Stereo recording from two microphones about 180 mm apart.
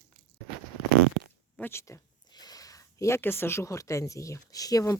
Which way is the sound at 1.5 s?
10° left (ahead or behind).